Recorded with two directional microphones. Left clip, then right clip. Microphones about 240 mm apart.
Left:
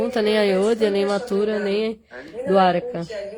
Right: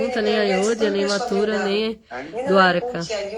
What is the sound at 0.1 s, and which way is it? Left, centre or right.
Speech, centre.